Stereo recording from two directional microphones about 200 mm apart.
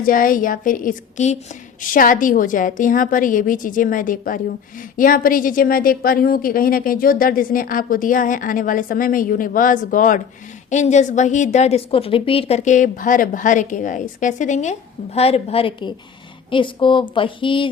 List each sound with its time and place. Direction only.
0.0 s a woman's voice: 45° left (ahead or behind); by 17.7 s 25° left (ahead or behind)